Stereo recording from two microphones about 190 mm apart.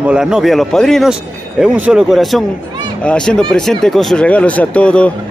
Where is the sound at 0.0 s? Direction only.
5° right (ahead or behind).